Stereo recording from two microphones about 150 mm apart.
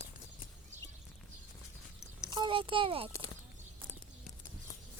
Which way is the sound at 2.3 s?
35° right (ahead or behind).